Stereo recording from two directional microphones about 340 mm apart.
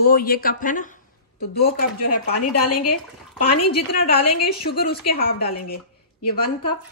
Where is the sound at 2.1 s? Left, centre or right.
Left.